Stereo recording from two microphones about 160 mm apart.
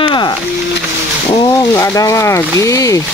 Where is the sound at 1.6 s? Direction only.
20° left (ahead or behind).